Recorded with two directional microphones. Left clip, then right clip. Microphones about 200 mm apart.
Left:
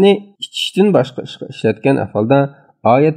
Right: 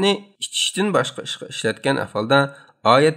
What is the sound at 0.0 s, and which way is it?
Speech, 20° left (ahead or behind).